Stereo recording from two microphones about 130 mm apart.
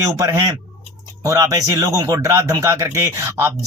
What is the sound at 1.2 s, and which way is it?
Speech, 25° right (ahead or behind).